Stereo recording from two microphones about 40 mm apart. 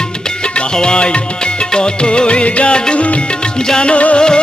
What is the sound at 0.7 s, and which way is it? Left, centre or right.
Music, left.